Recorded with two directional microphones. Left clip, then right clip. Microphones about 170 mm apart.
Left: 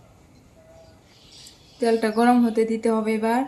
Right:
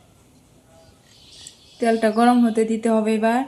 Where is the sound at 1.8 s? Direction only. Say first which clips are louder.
Right 2 dB; 40° right (ahead or behind).